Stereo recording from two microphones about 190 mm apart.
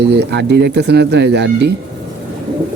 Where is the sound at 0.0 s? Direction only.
60° right (ahead or behind).